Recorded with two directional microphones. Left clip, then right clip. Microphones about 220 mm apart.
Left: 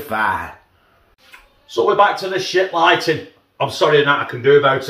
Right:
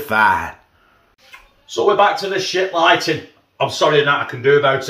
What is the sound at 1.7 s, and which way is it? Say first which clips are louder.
Speech: even; 5° right (ahead or behind).